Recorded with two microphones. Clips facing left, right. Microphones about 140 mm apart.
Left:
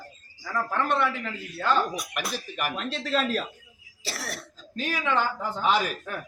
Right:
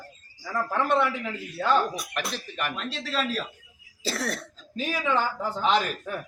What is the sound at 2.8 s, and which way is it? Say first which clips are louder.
Speech: left 6 dB; 45° left (ahead or behind).